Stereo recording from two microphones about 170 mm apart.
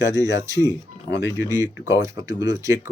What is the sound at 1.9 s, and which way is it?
Speech, 15° right (ahead or behind).